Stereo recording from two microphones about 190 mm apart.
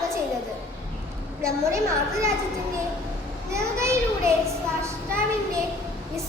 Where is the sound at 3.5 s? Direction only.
15° right (ahead or behind).